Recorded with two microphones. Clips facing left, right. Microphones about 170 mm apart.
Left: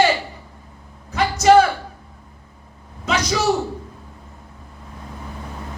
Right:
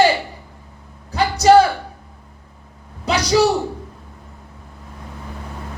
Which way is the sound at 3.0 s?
35° right (ahead or behind).